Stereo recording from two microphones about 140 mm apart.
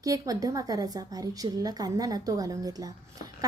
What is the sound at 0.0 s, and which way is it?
A woman's voice, 25° right (ahead or behind).